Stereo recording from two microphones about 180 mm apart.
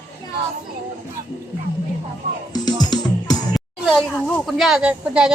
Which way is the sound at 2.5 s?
25° left (ahead or behind).